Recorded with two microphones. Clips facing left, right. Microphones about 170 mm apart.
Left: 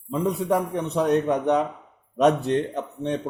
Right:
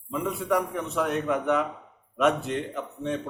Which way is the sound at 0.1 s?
35° left (ahead or behind).